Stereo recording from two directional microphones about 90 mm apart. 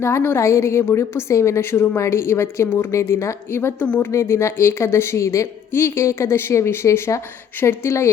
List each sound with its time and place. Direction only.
0.0 s a woman's voice: 25° left (ahead or behind)
4.1 s a woman's voice: 35° left (ahead or behind)